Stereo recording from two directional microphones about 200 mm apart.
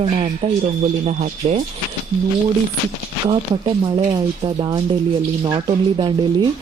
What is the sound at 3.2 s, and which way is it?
Speech, 25° right (ahead or behind).